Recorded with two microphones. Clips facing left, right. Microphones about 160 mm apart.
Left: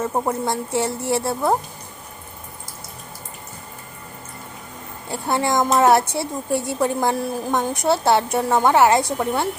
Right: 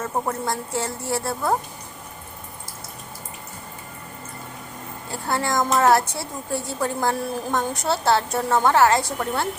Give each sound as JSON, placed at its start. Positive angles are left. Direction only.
{"t": 0.0, "sound": "a woman's voice", "side_deg": 20}
{"t": 5.1, "sound": "a woman's voice", "side_deg": 20}